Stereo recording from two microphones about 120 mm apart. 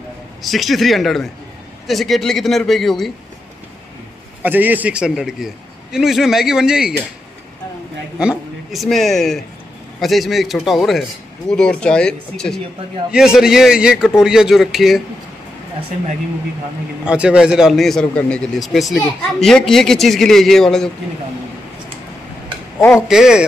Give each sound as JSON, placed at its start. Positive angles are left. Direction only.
{"t": 0.4, "sound": "a man's voice", "side_deg": 0}
{"t": 4.4, "sound": "a man's voice", "side_deg": -15}
{"t": 8.2, "sound": "a man's voice", "side_deg": -5}
{"t": 13.1, "sound": "a man's voice", "side_deg": -5}
{"t": 17.0, "sound": "a man's voice", "side_deg": -10}
{"t": 22.8, "sound": "speech", "side_deg": 20}
{"t": 23.0, "sound": "a man's voice", "side_deg": -5}